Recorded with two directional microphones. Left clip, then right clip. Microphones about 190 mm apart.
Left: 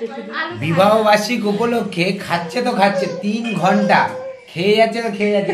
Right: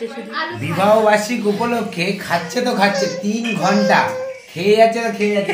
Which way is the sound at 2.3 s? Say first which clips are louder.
Even; centre (ahead or behind).